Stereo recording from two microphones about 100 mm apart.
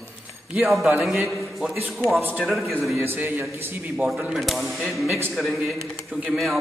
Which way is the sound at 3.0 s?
20° right (ahead or behind).